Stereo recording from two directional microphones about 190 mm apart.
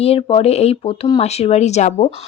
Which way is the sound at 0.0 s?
30° left (ahead or behind).